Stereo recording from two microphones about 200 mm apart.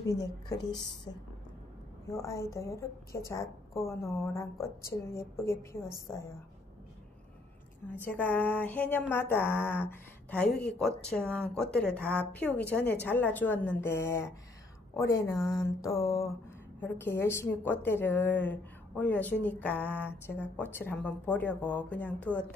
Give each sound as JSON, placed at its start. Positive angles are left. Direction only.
{"t": 0.0, "sound": "speech", "side_deg": 15}
{"t": 2.0, "sound": "speech", "side_deg": 15}
{"t": 7.9, "sound": "speech", "side_deg": 10}